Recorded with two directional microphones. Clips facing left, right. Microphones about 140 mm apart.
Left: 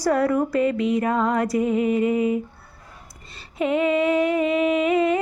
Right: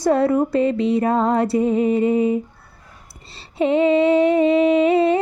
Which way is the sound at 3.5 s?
25° right (ahead or behind).